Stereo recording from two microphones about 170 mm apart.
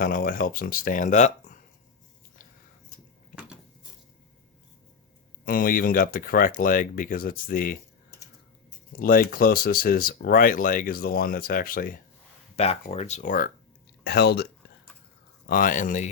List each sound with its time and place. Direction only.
0.0 s speech: 55° left (ahead or behind)
5.5 s speech: 55° left (ahead or behind)
12.5 s speech: 40° left (ahead or behind)
14.0 s speech: 70° left (ahead or behind)
15.4 s speech: 55° left (ahead or behind)